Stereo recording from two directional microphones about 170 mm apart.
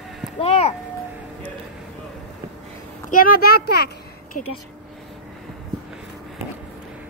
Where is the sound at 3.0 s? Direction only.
55° left (ahead or behind).